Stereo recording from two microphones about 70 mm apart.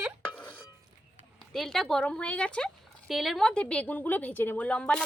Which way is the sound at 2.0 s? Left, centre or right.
Centre.